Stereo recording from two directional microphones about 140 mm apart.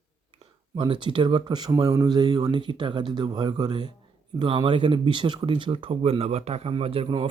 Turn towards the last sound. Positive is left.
turn(degrees=-40)  # may be behind; listen again after turning